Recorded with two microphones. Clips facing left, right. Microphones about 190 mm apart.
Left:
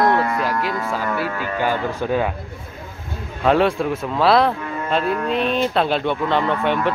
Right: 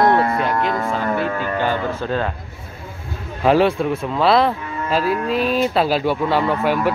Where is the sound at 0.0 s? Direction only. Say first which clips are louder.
Right 2 dB; 30° right (ahead or behind).